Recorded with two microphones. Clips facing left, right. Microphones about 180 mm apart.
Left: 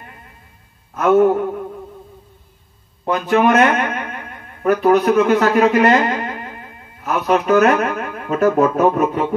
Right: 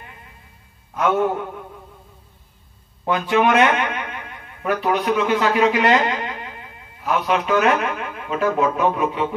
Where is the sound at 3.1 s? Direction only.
45° left (ahead or behind).